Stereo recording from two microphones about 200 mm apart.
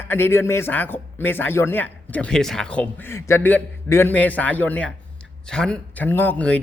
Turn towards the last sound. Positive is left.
turn(degrees=5)  # may be behind; listen again after turning